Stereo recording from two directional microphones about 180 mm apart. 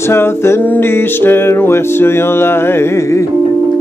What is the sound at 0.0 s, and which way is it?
Music, 15° left (ahead or behind).